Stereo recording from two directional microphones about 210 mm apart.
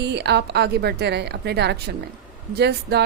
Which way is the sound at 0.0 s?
50° right (ahead or behind).